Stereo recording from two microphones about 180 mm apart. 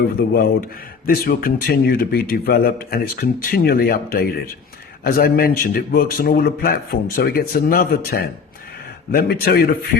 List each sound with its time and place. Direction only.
0.2 s speech: 60° left (ahead or behind)